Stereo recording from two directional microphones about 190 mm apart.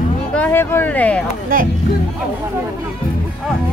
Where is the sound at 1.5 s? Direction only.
50° right (ahead or behind).